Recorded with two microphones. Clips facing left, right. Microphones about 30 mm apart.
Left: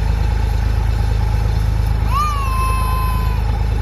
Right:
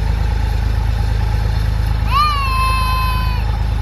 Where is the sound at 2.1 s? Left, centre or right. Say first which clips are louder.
Right 5 dB; right.